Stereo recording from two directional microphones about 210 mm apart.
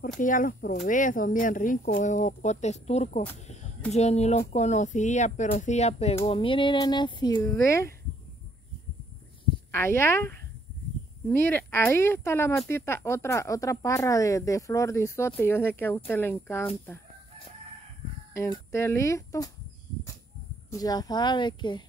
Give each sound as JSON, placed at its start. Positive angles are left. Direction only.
{"t": 0.2, "sound": "speech", "side_deg": 40}
{"t": 9.7, "sound": "speech", "side_deg": 10}
{"t": 18.3, "sound": "speech", "side_deg": 15}
{"t": 20.7, "sound": "speech", "side_deg": 15}